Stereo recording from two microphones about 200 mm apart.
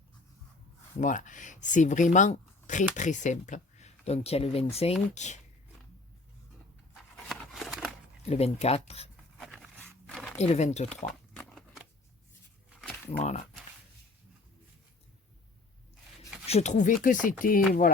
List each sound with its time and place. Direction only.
0.9 s speech: 40° left (ahead or behind)
6.9 s a sound: centre (ahead or behind)
8.3 s speech: 30° left (ahead or behind)
9.4 s dog: centre (ahead or behind)
10.1 s a sound: centre (ahead or behind)
10.3 s speech: 35° left (ahead or behind)
10.8 s a sound: 5° left (ahead or behind)
13.1 s speech: 35° left (ahead or behind)
16.5 s speech: 35° left (ahead or behind)